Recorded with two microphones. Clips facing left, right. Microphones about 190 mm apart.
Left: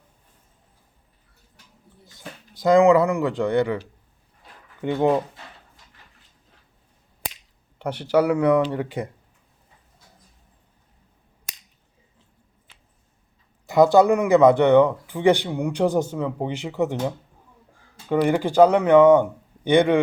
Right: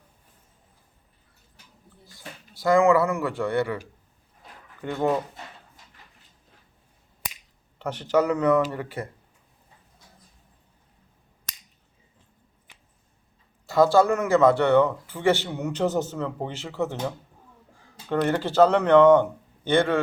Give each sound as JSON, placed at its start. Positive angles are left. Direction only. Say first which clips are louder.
{"t": 2.0, "sound": "speech", "louder": "left 3 dB", "side_deg": 20}
{"t": 4.8, "sound": "speech", "louder": "left 4 dB", "side_deg": 20}
{"t": 7.8, "sound": "speech", "louder": "left 2 dB", "side_deg": 10}
{"t": 12.7, "sound": "a sound", "louder": "right 2 dB", "side_deg": -15}
{"t": 13.7, "sound": "speech", "louder": "left 3 dB", "side_deg": 20}